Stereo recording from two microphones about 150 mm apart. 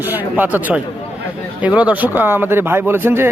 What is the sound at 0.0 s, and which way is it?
Speech, 10° right (ahead or behind).